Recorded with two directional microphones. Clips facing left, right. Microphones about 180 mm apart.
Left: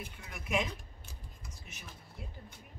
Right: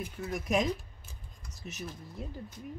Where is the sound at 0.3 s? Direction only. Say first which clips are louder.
Right 5 dB; 40° right (ahead or behind).